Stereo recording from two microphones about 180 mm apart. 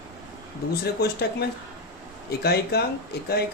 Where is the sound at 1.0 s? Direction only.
60° left (ahead or behind).